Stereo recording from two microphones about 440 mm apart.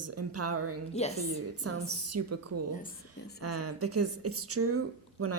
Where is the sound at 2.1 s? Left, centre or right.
Right.